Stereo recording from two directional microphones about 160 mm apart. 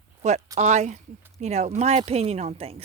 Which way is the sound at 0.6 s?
45° right (ahead or behind).